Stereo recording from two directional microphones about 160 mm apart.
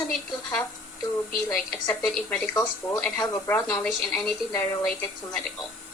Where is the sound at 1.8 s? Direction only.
10° left (ahead or behind).